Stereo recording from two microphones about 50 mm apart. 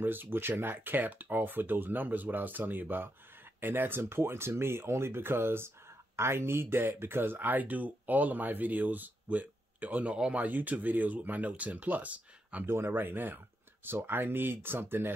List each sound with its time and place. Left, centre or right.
0.0 s speech: right
12.6 s speech: right
12.9 s speech: right